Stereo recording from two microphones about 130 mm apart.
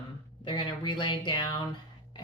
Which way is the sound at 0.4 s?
40° left (ahead or behind).